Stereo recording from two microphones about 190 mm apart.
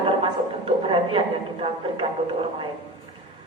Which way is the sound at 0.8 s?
25° right (ahead or behind).